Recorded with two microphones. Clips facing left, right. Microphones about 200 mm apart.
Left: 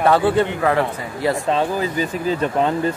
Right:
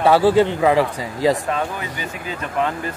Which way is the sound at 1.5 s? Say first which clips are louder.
Left 5 dB; 30° left (ahead or behind).